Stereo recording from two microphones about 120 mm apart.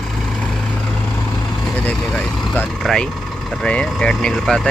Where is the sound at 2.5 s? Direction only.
5° left (ahead or behind).